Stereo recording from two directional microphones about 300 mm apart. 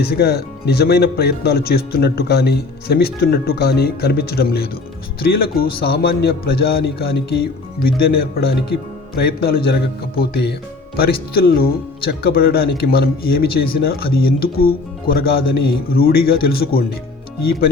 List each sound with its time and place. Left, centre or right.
0.0 s speech: left